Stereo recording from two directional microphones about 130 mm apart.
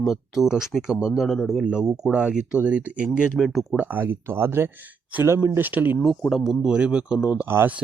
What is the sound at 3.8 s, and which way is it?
Speech, 15° right (ahead or behind).